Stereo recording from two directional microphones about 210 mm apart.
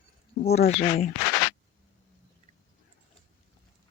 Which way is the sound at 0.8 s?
35° left (ahead or behind).